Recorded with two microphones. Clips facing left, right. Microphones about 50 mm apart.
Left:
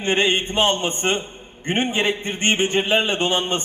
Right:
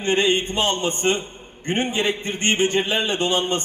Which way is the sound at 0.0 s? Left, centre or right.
Left.